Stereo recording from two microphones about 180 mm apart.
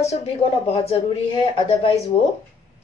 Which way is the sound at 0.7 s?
35° left (ahead or behind).